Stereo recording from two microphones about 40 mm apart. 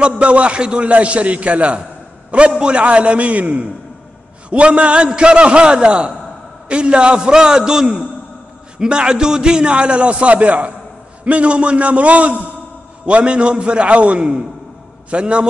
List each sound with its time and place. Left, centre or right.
0.0 s a man's voice: right